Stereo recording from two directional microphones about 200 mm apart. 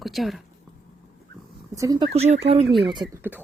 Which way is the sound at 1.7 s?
15° right (ahead or behind).